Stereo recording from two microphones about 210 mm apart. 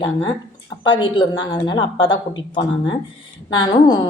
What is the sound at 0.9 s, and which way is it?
A woman's voice, 25° left (ahead or behind).